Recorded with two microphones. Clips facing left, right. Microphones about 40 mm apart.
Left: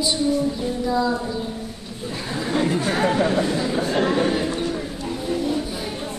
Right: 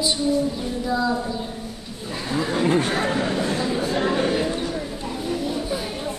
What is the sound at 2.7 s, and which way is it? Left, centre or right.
Chatter, right.